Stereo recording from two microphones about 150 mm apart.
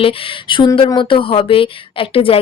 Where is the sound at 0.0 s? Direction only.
35° left (ahead or behind).